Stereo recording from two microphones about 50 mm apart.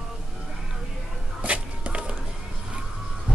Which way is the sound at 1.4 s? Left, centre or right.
Right.